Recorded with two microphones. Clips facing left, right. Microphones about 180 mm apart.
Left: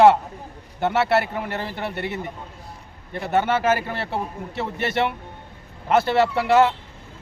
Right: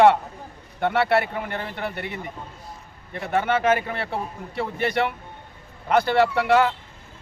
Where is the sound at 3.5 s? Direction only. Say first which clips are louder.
Even; 5° left (ahead or behind).